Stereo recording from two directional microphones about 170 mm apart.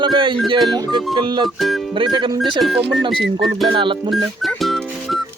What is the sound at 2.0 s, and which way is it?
Speech, 30° right (ahead or behind).